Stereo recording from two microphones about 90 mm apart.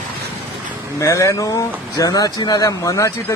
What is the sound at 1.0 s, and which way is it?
Speech, 35° left (ahead or behind).